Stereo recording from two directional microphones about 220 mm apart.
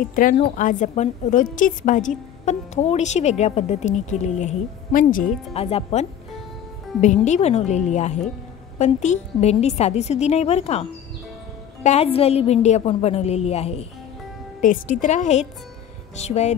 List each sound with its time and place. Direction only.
0.1 s a woman's voice: 35° left (ahead or behind)